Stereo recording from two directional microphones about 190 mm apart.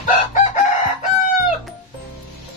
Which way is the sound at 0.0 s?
40° left (ahead or behind).